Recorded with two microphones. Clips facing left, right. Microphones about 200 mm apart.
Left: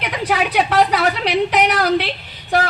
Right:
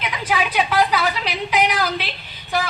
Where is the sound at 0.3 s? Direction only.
70° left (ahead or behind).